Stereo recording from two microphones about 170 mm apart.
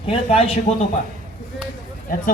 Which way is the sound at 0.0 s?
35° left (ahead or behind).